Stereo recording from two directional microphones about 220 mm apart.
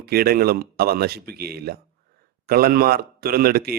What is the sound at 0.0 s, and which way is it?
Speech, 45° right (ahead or behind).